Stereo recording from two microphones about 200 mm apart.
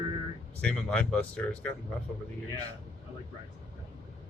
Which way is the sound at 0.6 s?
5° left (ahead or behind).